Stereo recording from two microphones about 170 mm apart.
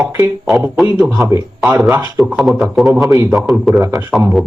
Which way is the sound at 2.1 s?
Centre (ahead or behind).